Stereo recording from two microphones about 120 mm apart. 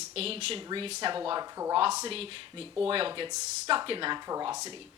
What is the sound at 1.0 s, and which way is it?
Speech, 40° right (ahead or behind).